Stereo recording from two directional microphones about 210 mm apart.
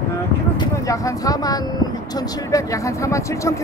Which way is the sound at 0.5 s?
15° left (ahead or behind).